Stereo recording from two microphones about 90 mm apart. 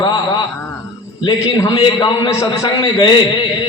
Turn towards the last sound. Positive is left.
turn(degrees=60)  # may be behind; listen again after turning